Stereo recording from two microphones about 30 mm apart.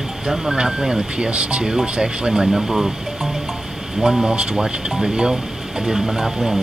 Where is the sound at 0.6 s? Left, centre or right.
Right.